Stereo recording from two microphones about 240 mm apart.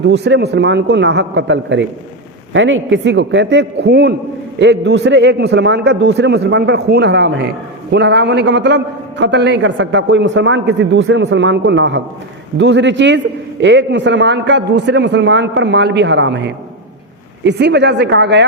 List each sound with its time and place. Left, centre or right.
0.1 s a man's voice: right